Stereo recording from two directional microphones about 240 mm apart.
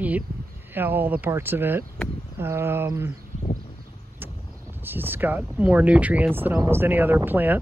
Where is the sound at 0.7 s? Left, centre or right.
Centre.